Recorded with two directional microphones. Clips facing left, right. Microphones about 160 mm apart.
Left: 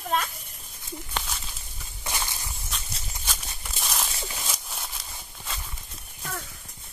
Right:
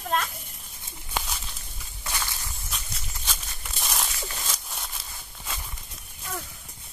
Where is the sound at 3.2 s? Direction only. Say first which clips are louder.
Even; centre (ahead or behind).